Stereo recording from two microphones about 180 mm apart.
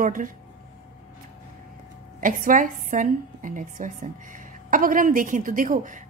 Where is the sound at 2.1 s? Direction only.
50° right (ahead or behind).